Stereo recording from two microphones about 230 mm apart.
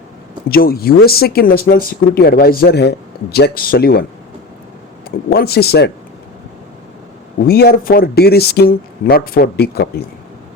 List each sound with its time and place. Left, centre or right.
0.4 s speech: left
5.3 s speech: left
7.4 s speech: left